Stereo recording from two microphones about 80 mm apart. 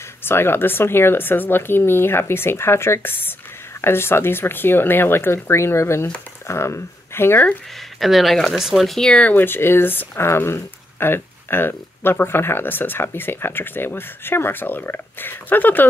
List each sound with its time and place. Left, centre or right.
0.2 s speech: left
8.0 s speech: centre; by 15.9 s left